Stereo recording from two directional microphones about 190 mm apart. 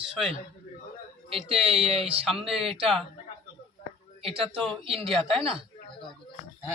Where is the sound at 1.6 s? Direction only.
35° right (ahead or behind).